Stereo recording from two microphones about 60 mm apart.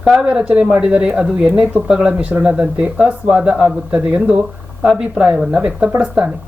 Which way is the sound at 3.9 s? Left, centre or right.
Right.